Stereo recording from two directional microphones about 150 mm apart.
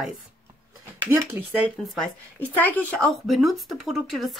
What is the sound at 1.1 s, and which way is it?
Speech, 15° right (ahead or behind).